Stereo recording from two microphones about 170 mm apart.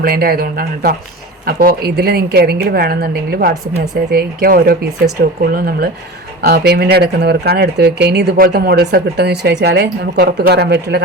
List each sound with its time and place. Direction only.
0.0 s a woman's voice: 60° right (ahead or behind); by 11.0 s 80° right